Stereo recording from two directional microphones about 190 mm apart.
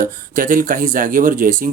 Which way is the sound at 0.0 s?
45° right (ahead or behind).